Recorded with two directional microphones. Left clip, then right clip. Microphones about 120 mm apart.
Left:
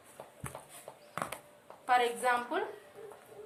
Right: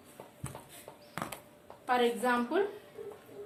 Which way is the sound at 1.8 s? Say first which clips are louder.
Even; 40° left (ahead or behind).